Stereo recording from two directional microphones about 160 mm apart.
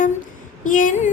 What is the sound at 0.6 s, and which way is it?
Speech, 55° left (ahead or behind).